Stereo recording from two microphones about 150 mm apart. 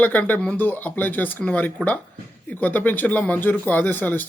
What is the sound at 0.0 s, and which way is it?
Speech, 10° left (ahead or behind).